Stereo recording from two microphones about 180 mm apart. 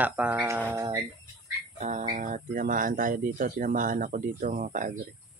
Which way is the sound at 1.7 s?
40° right (ahead or behind).